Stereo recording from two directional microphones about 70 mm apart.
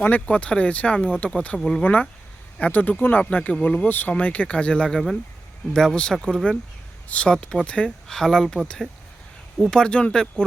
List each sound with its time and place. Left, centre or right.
0.0 s speech: left
1.8 s speech: left
3.8 s speech: left; by 10.4 s centre